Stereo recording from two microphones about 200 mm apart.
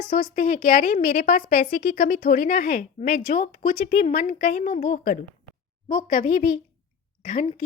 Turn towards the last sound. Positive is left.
turn(degrees=40)  # may be behind; listen again after turning